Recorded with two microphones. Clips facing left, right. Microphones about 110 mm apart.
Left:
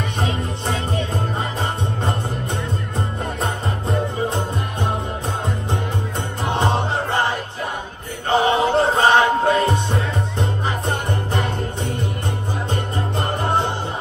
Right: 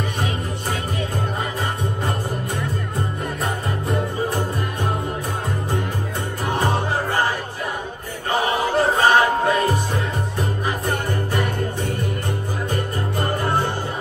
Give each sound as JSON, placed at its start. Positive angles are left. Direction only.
{"t": 0.2, "sound": "music", "side_deg": 30}
{"t": 3.4, "sound": "music", "side_deg": 30}
{"t": 6.4, "sound": "music", "side_deg": 25}
{"t": 8.3, "sound": "music", "side_deg": 30}
{"t": 10.9, "sound": "music", "side_deg": 25}